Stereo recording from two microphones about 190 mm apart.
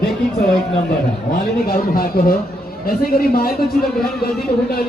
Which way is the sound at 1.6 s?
50° left (ahead or behind).